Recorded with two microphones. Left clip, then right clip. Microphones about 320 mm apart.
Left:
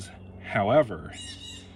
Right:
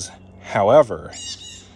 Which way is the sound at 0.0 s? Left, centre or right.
Centre.